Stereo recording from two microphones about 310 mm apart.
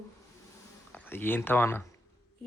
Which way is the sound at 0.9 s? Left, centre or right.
Centre.